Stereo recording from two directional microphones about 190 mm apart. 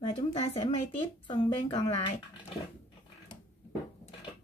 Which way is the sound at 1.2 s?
25° left (ahead or behind).